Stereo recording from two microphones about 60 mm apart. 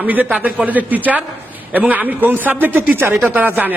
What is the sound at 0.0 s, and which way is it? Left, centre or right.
A man's voice, right.